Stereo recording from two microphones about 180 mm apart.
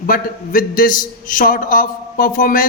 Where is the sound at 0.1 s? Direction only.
50° left (ahead or behind).